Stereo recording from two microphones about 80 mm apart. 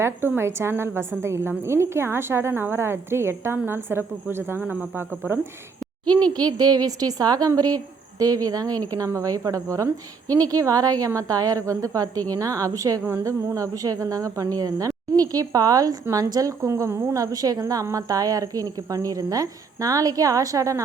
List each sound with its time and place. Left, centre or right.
0.0 s a woman's voice: right
6.3 s a woman's voice: right